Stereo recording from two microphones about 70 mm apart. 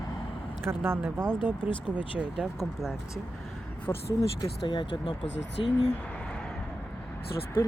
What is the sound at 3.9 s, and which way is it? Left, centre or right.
Speech, left.